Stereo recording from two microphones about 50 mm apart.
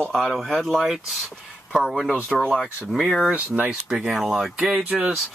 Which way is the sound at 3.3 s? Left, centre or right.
Right.